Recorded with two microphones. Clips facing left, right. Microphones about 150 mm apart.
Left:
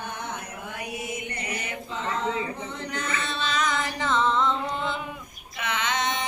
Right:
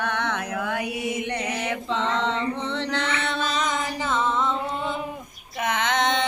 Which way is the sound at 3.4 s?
40° right (ahead or behind).